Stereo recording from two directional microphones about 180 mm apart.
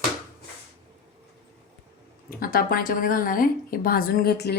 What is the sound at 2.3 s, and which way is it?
A woman's voice, 55° left (ahead or behind).